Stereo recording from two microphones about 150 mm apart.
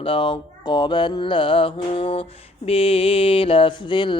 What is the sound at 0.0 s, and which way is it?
Mantra, 35° left (ahead or behind).